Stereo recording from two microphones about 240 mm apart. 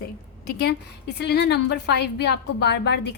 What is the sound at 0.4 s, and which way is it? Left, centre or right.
A woman's voice, left.